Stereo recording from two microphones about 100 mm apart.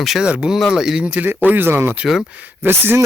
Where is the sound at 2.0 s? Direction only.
5° right (ahead or behind).